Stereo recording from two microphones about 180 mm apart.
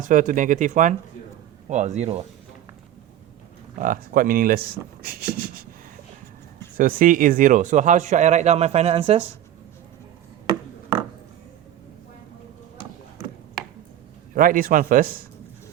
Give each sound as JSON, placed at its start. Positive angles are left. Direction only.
{"t": 0.0, "sound": "speech", "side_deg": -45}
{"t": 3.8, "sound": "speech", "side_deg": -50}
{"t": 5.0, "sound": "a sound", "side_deg": -55}
{"t": 6.7, "sound": "speech", "side_deg": -50}
{"t": 14.3, "sound": "speech", "side_deg": -50}